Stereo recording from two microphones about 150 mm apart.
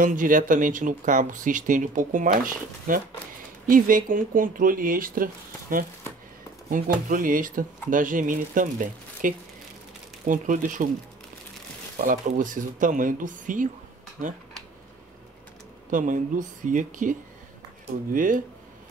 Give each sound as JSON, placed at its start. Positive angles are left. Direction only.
{"t": 0.0, "sound": "speech", "side_deg": -60}
{"t": 12.0, "sound": "speech", "side_deg": -60}
{"t": 15.9, "sound": "speech", "side_deg": -60}